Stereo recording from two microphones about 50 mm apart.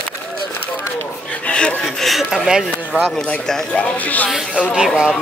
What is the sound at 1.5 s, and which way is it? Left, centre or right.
Speech, left.